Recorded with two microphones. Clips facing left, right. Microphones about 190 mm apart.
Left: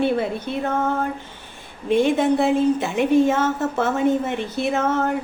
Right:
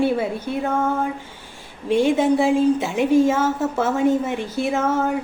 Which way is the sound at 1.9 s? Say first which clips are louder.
Even; 55° left (ahead or behind).